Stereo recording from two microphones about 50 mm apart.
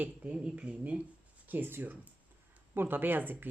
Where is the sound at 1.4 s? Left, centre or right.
Right.